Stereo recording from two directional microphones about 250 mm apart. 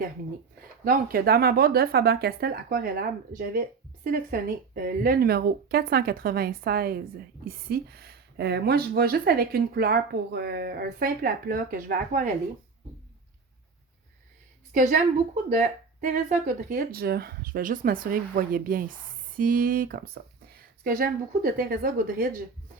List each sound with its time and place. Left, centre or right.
0.6 s speech: right
14.7 s a woman's voice: right